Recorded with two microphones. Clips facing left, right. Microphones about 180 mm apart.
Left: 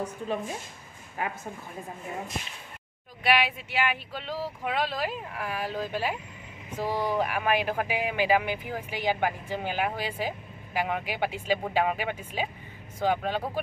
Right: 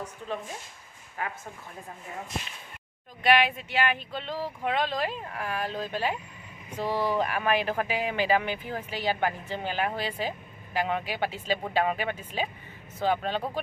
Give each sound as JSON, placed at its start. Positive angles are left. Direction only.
{"t": 1.2, "sound": "speech", "side_deg": 15}
{"t": 3.3, "sound": "speech", "side_deg": 5}